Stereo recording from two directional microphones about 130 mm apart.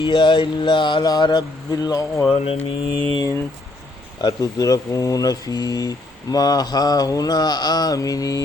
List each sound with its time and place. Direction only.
0.0 s mantra: 40° left (ahead or behind)
2.3 s speech: 45° left (ahead or behind)
3.2 s mantra: 25° left (ahead or behind)